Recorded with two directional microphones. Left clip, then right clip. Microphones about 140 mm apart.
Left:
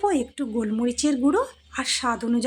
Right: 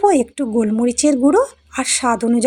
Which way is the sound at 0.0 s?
35° right (ahead or behind).